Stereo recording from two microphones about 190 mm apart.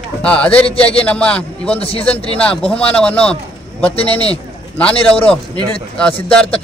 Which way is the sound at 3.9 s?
30° left (ahead or behind).